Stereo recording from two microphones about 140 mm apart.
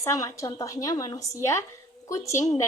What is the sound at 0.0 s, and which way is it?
A woman's voice, 20° left (ahead or behind).